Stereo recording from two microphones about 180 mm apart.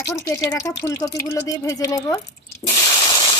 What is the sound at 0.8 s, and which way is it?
Speech, 15° left (ahead or behind).